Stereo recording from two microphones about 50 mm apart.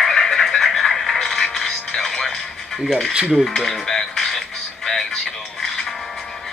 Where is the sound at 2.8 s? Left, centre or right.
Centre.